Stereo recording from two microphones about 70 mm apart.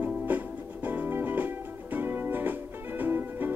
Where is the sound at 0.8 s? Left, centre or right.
Right.